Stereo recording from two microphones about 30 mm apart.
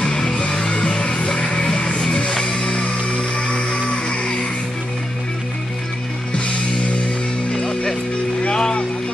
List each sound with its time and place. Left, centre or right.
0.0 s music: left
8.5 s music: left